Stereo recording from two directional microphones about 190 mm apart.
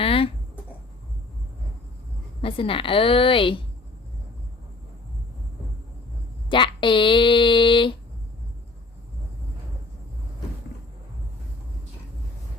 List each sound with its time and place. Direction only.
0.0 s a sound: 30° left (ahead or behind)
2.4 s a woman's voice: 30° left (ahead or behind)
6.5 s speech: 25° left (ahead or behind)